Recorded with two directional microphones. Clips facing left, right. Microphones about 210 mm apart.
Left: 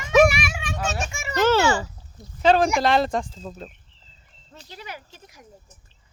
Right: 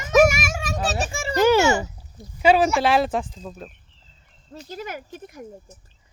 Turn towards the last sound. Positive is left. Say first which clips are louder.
# right 8 dB
turn(degrees=-55)  # may be behind; listen again after turning